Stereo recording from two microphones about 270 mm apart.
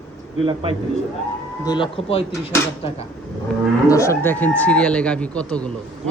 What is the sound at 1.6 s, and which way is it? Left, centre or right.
Speech, centre.